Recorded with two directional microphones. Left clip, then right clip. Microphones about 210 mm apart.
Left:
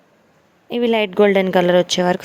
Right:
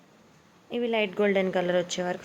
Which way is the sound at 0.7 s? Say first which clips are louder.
Left 9 dB; 45° left (ahead or behind).